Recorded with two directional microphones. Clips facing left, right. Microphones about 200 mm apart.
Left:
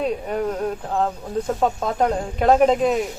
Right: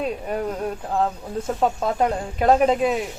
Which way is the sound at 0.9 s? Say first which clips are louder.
Even; centre (ahead or behind).